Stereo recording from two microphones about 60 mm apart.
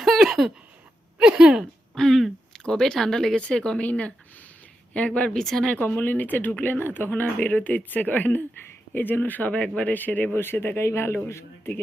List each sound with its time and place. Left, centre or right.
0.0 s a sound: centre
1.2 s speech: centre
2.0 s speech: centre
3.8 s speech: left; by 5.7 s centre
5.8 s speech: left
10.3 s speech: left